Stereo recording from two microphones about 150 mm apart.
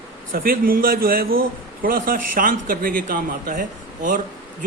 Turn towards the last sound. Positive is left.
turn(degrees=-60)  # may be behind; listen again after turning